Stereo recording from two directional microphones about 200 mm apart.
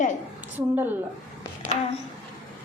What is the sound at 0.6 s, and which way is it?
Speech, 10° right (ahead or behind).